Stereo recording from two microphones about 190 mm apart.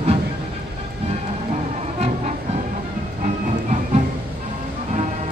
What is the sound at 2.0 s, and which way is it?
Music, 35° right (ahead or behind).